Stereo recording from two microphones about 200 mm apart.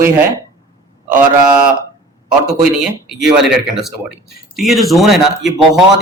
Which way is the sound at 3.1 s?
Centre (ahead or behind).